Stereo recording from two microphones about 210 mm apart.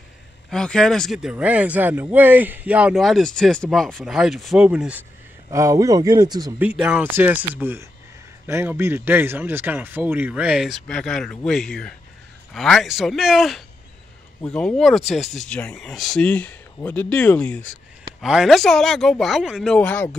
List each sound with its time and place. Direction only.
0.5 s speech: 5° left (ahead or behind); by 6.5 s 20° right (ahead or behind)
6.6 s speech: 5° right (ahead or behind)